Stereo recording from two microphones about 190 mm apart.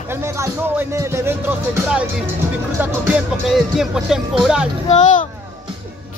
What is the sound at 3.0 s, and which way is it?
Speech, 5° right (ahead or behind).